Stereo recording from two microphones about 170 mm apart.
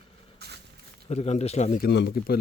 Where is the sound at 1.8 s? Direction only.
75° left (ahead or behind).